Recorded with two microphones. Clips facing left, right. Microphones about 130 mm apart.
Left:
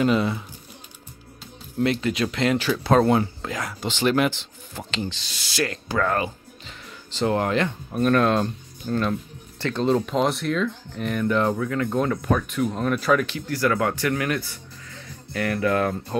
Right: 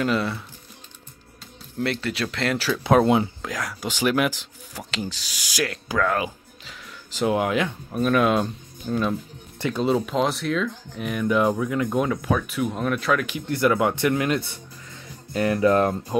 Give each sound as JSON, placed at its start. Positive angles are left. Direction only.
{"t": 0.0, "sound": "speech", "side_deg": 0}
{"t": 1.8, "sound": "speech", "side_deg": 0}
{"t": 2.8, "sound": "speech", "side_deg": -15}
{"t": 12.1, "sound": "speech", "side_deg": 0}
{"t": 13.5, "sound": "speech", "side_deg": -20}